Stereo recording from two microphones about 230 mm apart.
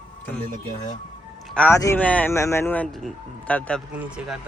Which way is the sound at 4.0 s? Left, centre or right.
Centre.